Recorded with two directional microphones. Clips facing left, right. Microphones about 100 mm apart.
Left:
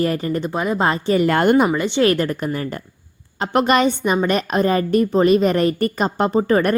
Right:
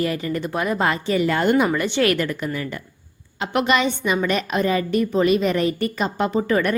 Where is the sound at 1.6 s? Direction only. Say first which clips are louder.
Left 3 dB; 20° left (ahead or behind).